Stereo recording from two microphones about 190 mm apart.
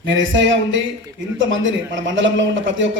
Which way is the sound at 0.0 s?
80° right.